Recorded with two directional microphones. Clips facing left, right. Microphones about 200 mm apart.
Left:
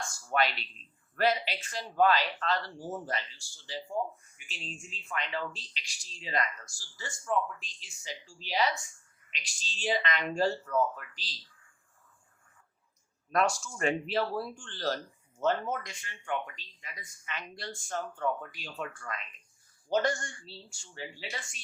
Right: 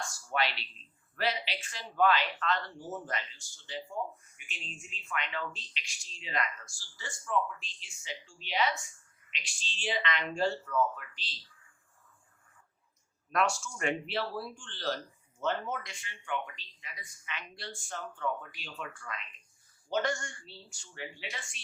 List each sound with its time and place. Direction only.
1.1 s speech: 45° left (ahead or behind)
13.3 s speech: 40° left (ahead or behind)